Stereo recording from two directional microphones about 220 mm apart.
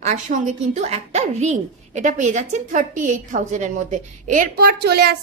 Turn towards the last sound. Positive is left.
turn(degrees=-45)  # may be behind; listen again after turning